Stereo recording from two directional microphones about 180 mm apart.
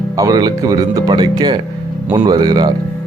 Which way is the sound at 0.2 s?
20° right (ahead or behind).